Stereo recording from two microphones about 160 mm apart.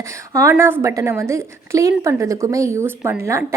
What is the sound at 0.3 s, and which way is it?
A woman's voice, 20° right (ahead or behind).